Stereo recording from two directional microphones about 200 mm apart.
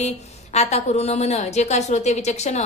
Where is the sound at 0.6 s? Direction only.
35° left (ahead or behind).